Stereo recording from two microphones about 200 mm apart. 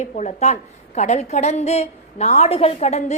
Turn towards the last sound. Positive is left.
turn(degrees=35)  # may be behind; listen again after turning